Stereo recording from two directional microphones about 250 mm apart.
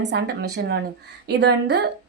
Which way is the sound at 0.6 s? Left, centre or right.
Right.